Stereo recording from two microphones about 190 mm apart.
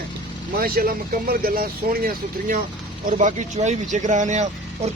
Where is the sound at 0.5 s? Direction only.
50° right (ahead or behind).